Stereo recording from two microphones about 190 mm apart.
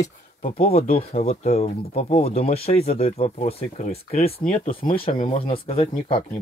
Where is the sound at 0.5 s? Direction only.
30° left (ahead or behind).